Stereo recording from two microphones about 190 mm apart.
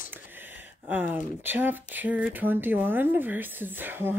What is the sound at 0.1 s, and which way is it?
Speech, 10° right (ahead or behind).